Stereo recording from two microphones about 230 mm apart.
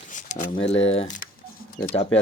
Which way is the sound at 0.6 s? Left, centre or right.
Left.